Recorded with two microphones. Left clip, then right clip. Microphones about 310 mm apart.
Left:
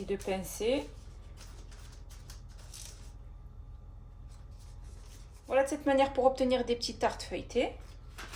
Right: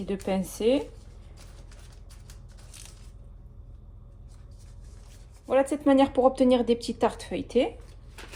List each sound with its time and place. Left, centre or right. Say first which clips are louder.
0.1 s speech: right 5 dB; right
5.5 s speech: right 6 dB; right